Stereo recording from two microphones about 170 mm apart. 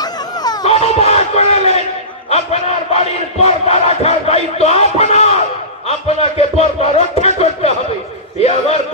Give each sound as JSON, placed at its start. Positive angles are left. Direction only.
{"t": 0.0, "sound": "a sound", "side_deg": 25}
{"t": 0.7, "sound": "speech", "side_deg": 35}
{"t": 2.2, "sound": "battle cry", "side_deg": 40}